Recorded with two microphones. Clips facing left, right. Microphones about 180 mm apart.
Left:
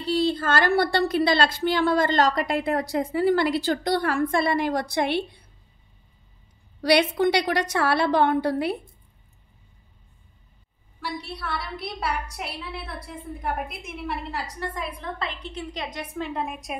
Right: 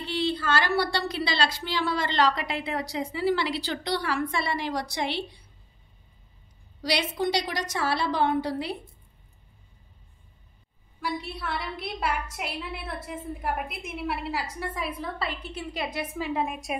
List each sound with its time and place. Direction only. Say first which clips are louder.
0.0 s a woman's voice: left 5 dB; 40° left (ahead or behind)
6.8 s a woman's voice: left 7 dB; 60° left (ahead or behind)
11.1 s a woman's voice: left 1 dB; centre (ahead or behind)